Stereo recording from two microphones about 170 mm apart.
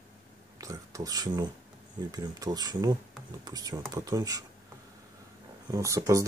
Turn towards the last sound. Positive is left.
turn(degrees=-20)  # may be behind; listen again after turning